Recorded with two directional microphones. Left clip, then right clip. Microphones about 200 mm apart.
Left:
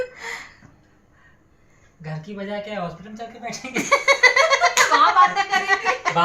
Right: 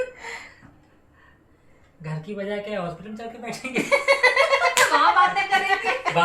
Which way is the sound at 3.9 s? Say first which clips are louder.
Left 3 dB; 45° left (ahead or behind).